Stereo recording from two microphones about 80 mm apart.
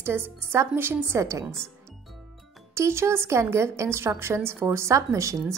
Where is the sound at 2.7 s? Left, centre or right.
Right.